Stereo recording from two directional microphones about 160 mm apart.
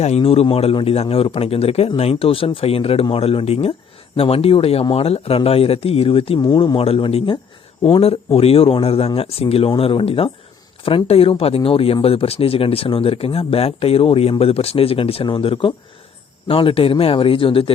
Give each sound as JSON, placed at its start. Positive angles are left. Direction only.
{"t": 0.0, "sound": "speech", "side_deg": 40}